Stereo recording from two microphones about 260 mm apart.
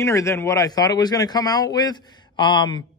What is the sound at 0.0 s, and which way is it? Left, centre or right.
Speech, centre.